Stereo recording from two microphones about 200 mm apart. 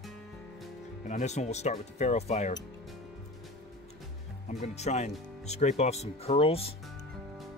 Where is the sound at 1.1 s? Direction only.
35° left (ahead or behind).